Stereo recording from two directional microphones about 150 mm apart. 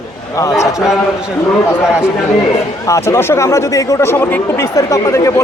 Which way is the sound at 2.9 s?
20° left (ahead or behind).